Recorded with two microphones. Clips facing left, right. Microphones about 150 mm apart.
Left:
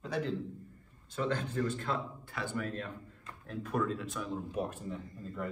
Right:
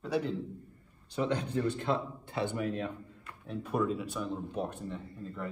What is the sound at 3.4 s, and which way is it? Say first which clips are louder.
Speech: right 2 dB; 10° right (ahead or behind).